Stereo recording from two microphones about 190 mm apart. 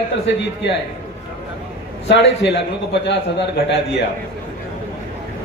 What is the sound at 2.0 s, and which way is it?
A man's voice, 65° left (ahead or behind).